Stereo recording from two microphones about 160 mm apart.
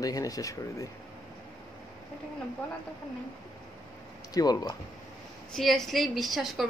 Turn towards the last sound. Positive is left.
turn(degrees=0)  # may be behind; listen again after turning